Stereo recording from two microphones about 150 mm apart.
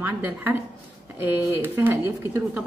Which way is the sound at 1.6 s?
15° right (ahead or behind).